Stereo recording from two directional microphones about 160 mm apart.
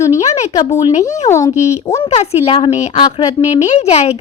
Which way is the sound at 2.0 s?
40° left (ahead or behind).